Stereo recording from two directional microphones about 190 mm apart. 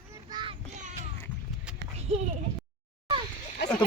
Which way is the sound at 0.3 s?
20° right (ahead or behind).